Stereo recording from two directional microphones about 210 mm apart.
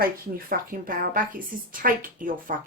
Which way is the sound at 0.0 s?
45° right (ahead or behind).